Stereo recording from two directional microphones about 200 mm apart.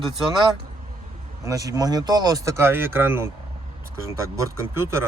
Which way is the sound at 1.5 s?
15° right (ahead or behind).